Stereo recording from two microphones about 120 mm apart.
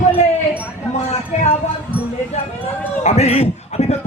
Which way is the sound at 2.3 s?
70° left (ahead or behind).